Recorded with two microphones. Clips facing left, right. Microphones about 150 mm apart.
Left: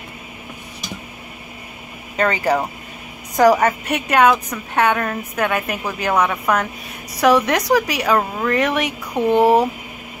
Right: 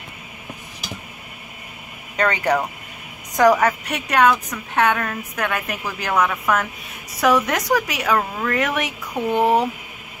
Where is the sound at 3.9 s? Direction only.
5° left (ahead or behind).